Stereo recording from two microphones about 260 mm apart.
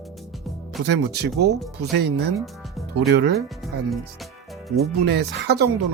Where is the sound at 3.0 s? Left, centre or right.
Right.